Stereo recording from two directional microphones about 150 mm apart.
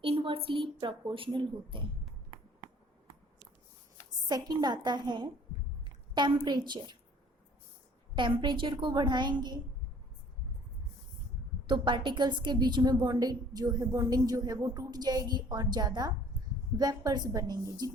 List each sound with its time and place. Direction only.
0.0 s a sound: 35° right (ahead or behind)
0.8 s a woman's voice: 35° right (ahead or behind)
4.3 s a woman's voice: 25° right (ahead or behind)
8.4 s a woman's voice: 35° right (ahead or behind)
11.6 s a woman's voice: 30° right (ahead or behind)